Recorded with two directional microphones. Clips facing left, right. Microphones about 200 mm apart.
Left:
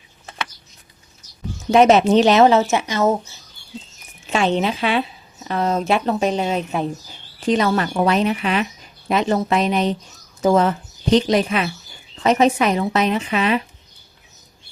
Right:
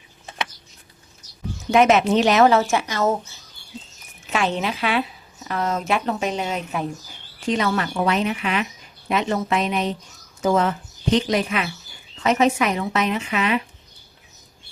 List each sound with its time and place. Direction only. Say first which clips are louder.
1.7 s a woman's voice: left 4 dB; 35° left (ahead or behind)
4.3 s a woman's voice: left 4 dB; 30° left (ahead or behind)